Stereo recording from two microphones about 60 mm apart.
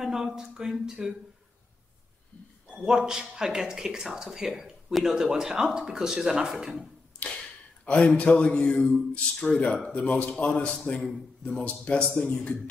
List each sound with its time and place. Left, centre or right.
0.0 s speech: centre
2.7 s speech: centre
7.2 s a sound: centre
7.8 s a man's voice: left